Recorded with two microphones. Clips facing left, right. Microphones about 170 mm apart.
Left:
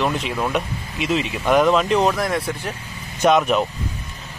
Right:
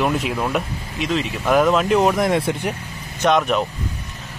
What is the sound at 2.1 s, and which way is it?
Speech, 25° right (ahead or behind).